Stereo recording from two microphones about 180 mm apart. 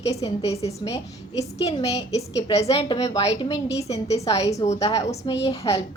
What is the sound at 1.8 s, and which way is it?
A woman's voice, 20° left (ahead or behind).